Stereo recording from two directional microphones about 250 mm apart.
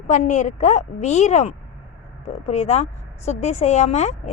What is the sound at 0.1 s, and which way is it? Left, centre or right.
Speech, left.